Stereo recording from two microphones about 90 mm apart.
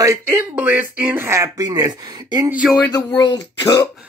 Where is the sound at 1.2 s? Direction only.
35° right (ahead or behind).